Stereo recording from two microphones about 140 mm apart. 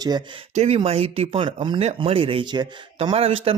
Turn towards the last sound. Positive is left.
turn(degrees=-40)  # may be behind; listen again after turning